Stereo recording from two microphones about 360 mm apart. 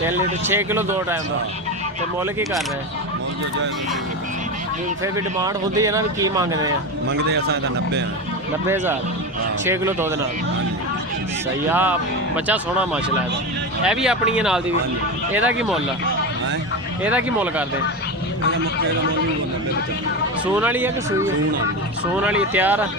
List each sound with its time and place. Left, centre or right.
0.4 s speech: centre
5.1 s speech: centre
7.1 s a man's voice: right
8.6 s speech: centre
11.7 s speech: centre
17.0 s speech: centre
20.6 s speech: centre